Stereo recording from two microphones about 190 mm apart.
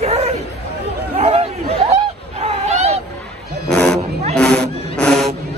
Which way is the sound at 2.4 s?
35° right (ahead or behind).